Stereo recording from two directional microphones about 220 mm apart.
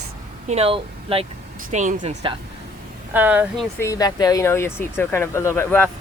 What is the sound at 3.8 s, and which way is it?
Speech, 15° left (ahead or behind).